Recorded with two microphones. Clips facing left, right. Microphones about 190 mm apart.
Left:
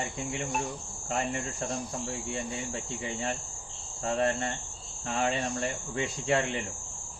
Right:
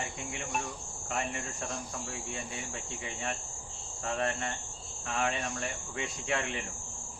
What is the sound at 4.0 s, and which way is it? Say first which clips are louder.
Speech: left 5 dB; 30° left (ahead or behind).